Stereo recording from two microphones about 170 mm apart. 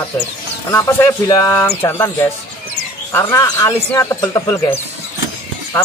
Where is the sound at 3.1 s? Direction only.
20° left (ahead or behind).